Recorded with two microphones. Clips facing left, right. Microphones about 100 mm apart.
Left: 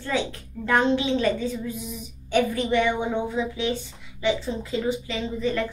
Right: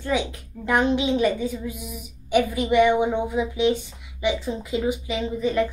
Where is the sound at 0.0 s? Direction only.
15° right (ahead or behind).